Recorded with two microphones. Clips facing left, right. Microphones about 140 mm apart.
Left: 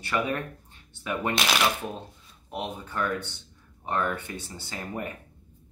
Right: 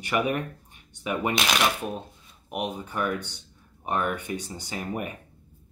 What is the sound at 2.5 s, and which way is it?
Speech, 15° right (ahead or behind).